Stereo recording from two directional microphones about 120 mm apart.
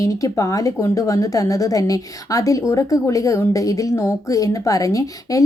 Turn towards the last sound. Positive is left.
turn(degrees=30)  # may be behind; listen again after turning